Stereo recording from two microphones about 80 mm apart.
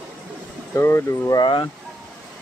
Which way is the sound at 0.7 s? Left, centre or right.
Left.